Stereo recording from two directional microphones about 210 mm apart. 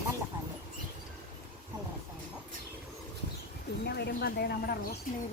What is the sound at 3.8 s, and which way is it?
Speech, 50° left (ahead or behind).